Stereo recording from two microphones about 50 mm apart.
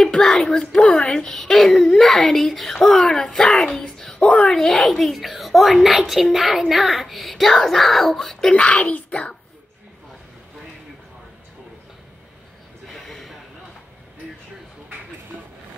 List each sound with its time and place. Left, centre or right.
0.0 s speech: centre
3.8 s a sound: centre
4.2 s speech: left
4.5 s a woman's voice: centre
8.5 s speech: left
12.8 s a sound: centre